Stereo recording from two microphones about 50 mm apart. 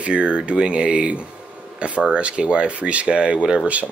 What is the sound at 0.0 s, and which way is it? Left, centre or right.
A man's voice, right.